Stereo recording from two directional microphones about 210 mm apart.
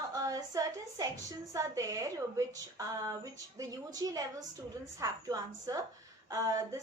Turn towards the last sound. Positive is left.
turn(degrees=-15)  # may be behind; listen again after turning